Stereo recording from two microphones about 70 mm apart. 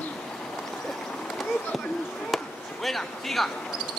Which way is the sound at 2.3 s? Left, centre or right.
Centre.